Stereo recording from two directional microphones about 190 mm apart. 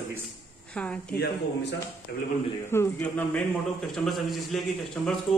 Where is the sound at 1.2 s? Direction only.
60° left (ahead or behind).